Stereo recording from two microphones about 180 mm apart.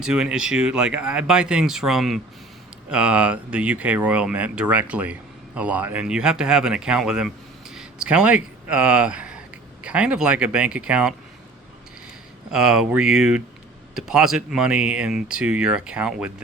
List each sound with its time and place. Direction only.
0.0 s speech: 5° right (ahead or behind)
12.5 s speech: 5° right (ahead or behind)